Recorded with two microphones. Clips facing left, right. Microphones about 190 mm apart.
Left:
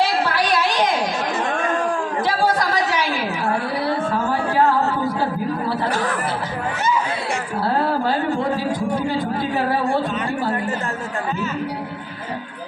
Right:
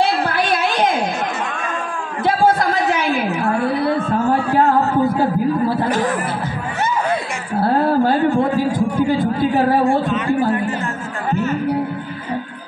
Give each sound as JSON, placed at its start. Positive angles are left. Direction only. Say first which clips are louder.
{"t": 2.2, "sound": "a woman's voice", "louder": "right 6 dB", "side_deg": -55}
{"t": 5.9, "sound": "speech", "louder": "right 4 dB", "side_deg": -20}